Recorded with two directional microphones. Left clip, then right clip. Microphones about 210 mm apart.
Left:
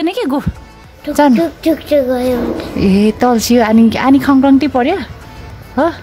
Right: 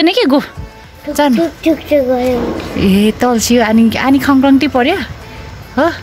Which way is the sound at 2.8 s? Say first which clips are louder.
Even; 15° left (ahead or behind).